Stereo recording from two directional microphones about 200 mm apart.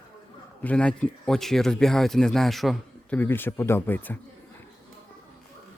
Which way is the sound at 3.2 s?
10° left (ahead or behind).